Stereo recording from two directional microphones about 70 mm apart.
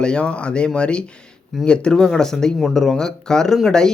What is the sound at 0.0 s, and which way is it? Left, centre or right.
Speech, centre.